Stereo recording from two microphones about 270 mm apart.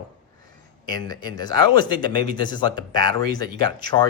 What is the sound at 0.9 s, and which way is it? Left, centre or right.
Speech, centre.